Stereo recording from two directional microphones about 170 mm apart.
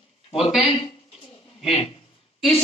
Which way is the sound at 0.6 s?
35° left (ahead or behind).